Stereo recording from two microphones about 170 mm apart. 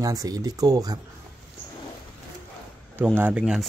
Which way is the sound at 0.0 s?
20° right (ahead or behind).